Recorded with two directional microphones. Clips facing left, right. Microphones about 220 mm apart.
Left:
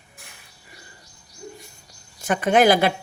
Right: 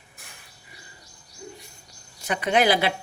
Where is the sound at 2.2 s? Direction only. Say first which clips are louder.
Left 5 dB; 50° left (ahead or behind).